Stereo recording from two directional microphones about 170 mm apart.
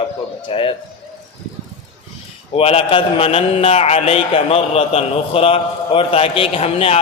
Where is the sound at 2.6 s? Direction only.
35° left (ahead or behind).